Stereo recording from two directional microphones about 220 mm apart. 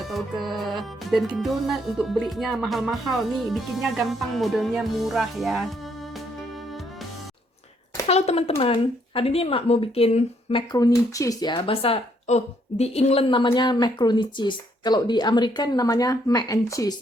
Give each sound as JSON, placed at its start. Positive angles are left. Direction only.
{"t": 0.0, "sound": "music", "side_deg": 0}
{"t": 8.0, "sound": "speech", "side_deg": 30}